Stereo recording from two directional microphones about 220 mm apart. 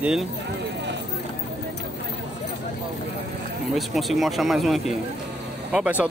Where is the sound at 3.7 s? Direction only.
Centre (ahead or behind).